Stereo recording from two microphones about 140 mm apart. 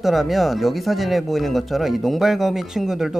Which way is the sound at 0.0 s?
Centre (ahead or behind).